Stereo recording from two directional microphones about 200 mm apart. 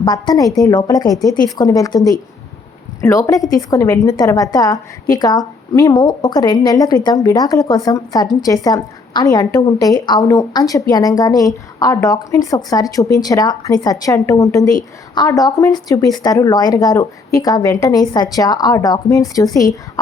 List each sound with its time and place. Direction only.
0.0 s a woman's voice: 20° left (ahead or behind)